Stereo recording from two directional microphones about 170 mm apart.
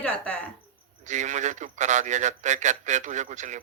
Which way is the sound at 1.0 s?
45° right (ahead or behind).